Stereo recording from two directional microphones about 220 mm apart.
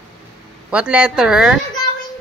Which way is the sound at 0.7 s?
5° right (ahead or behind).